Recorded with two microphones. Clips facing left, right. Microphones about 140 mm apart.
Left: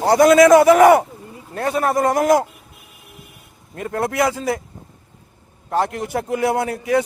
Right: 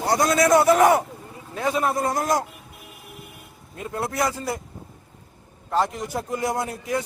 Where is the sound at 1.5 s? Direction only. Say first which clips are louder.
Left 4 dB; 60° left (ahead or behind); by 2.3 s 80° left.